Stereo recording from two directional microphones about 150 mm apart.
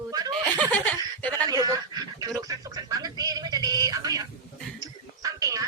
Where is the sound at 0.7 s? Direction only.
10° left (ahead or behind).